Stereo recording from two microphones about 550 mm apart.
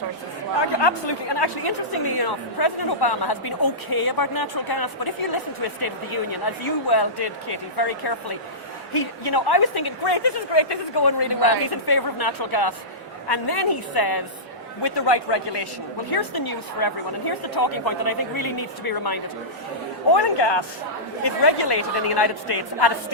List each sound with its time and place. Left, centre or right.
0.8 s a woman's voice: left